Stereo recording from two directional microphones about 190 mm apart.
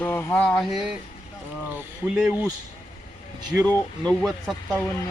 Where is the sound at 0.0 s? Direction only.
10° left (ahead or behind); by 2.5 s 5° right (ahead or behind).